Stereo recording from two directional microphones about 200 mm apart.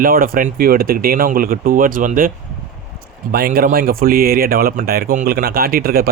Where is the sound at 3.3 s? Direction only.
50° right (ahead or behind).